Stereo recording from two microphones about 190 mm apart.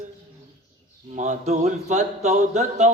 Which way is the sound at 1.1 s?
40° right (ahead or behind).